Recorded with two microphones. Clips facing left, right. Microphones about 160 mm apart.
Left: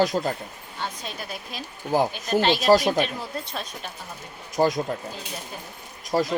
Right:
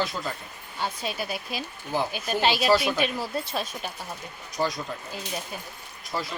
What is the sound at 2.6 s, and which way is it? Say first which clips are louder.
Speech: left 6 dB; 40° left (ahead or behind).